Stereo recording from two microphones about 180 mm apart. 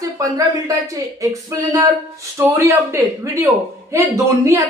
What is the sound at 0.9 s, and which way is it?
A woman's voice, 20° right (ahead or behind).